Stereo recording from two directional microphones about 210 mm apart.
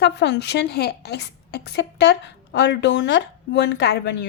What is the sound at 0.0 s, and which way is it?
A woman's voice, 55° left (ahead or behind).